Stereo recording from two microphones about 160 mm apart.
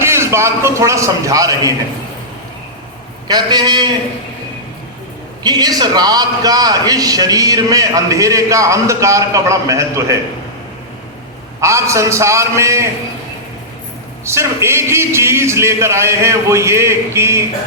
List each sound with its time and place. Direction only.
0.0 s a man's voice: 15° right (ahead or behind)
3.2 s a man's voice: 25° right (ahead or behind)
5.4 s a man's voice: 25° right (ahead or behind)
11.6 s a man's voice: 20° right (ahead or behind)
14.3 s a man's voice: 15° right (ahead or behind)